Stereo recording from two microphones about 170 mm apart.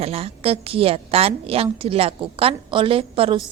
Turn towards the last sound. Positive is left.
turn(degrees=-30)  # may be behind; listen again after turning